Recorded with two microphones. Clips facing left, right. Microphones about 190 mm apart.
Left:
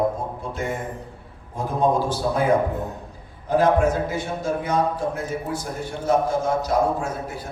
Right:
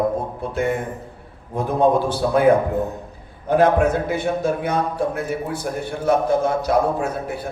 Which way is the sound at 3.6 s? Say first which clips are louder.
Right 2 dB; 60° right (ahead or behind).